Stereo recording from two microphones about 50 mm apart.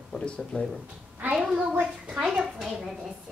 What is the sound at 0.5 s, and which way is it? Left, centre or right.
Speech, left.